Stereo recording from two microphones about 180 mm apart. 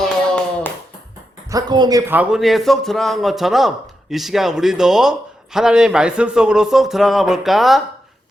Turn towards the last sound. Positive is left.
turn(degrees=0)  # may be behind; listen again after turning